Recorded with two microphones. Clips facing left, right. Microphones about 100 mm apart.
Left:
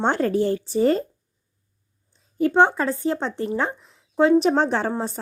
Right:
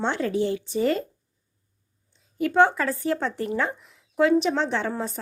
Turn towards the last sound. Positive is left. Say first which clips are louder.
# left 3 dB
turn(degrees=30)  # may be behind; listen again after turning